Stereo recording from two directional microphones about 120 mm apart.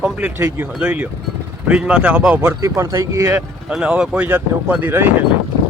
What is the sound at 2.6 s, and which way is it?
Speech, 25° right (ahead or behind).